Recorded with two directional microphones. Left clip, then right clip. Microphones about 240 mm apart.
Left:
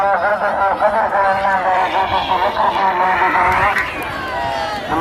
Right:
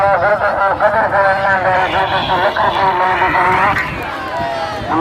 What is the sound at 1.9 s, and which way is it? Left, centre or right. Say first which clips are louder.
Horse: right 1 dB; centre.